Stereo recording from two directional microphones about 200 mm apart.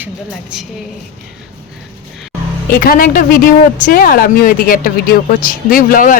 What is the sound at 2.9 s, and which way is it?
Speech, 45° left (ahead or behind).